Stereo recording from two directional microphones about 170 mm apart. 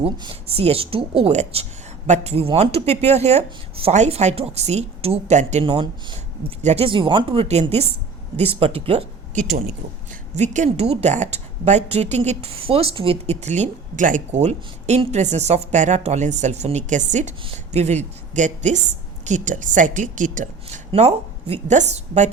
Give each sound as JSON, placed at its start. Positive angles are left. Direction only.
{"t": 0.0, "sound": "a woman's voice", "side_deg": -35}
{"t": 6.6, "sound": "a woman's voice", "side_deg": -40}